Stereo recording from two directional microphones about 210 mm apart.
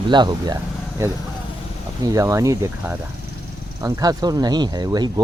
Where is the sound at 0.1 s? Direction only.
20° right (ahead or behind).